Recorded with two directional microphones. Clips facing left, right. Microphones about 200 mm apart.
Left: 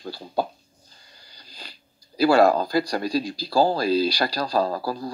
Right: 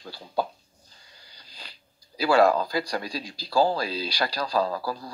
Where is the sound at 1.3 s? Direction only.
40° left (ahead or behind).